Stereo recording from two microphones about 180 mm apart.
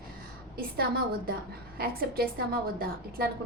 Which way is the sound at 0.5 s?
55° right (ahead or behind).